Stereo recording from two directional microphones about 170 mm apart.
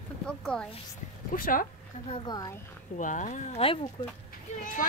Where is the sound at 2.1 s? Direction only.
35° left (ahead or behind).